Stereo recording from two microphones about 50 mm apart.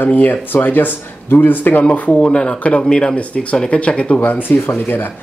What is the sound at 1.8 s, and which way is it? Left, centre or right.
Speech, left.